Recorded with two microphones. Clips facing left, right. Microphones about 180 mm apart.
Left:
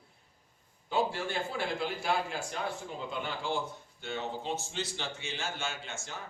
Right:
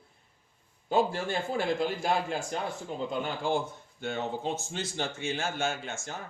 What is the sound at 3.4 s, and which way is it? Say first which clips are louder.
A man's voice: right 5 dB; 50° right (ahead or behind).